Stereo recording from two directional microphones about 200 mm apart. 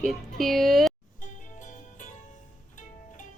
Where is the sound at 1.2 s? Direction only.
40° left (ahead or behind).